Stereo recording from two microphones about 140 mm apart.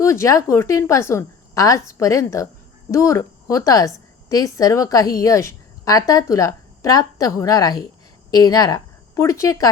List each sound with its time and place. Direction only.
0.0 s a woman's voice: 20° left (ahead or behind)